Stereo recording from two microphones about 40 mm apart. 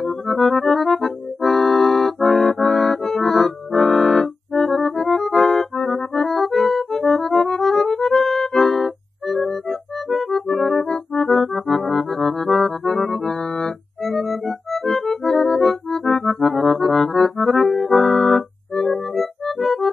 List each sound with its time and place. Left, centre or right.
0.0 s music: centre
13.3 s music: centre
14.0 s music: centre
18.2 s music: centre